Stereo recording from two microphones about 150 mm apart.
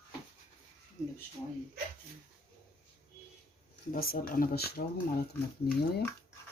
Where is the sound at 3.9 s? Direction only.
75° left (ahead or behind).